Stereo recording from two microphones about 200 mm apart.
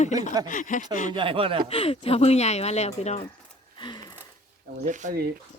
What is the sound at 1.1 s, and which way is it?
Speech, 25° right (ahead or behind).